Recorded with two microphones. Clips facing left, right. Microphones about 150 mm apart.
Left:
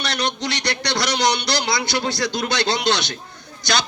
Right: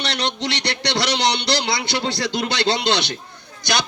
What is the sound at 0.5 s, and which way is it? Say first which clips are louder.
A man's voice: right 1 dB; 30° right (ahead or behind).